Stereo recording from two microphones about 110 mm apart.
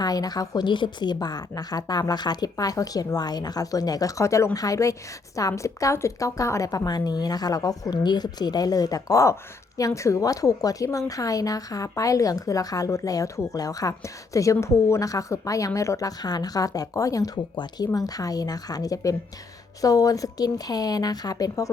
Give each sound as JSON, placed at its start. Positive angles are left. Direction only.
{"t": 0.0, "sound": "a woman's voice", "side_deg": 35}